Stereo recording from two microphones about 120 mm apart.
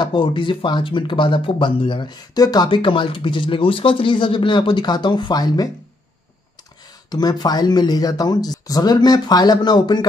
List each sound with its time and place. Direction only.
0.0 s speech: 40° left (ahead or behind)
7.1 s speech: 35° left (ahead or behind)